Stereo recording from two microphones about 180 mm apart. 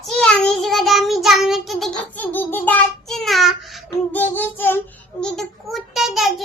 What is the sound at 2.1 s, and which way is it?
Child singing, 10° left (ahead or behind).